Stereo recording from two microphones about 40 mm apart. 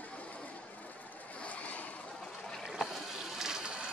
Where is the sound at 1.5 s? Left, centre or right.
Left.